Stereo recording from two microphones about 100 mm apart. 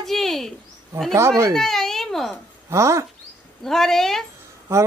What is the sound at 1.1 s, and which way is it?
Speech, 30° right (ahead or behind).